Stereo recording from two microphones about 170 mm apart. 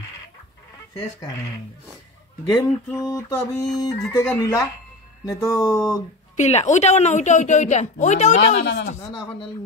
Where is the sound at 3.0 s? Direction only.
20° left (ahead or behind).